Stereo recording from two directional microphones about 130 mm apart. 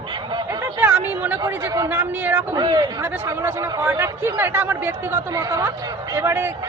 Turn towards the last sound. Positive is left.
turn(degrees=-20)  # may be behind; listen again after turning